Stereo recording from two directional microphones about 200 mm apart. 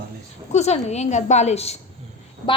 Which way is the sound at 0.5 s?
35° left (ahead or behind).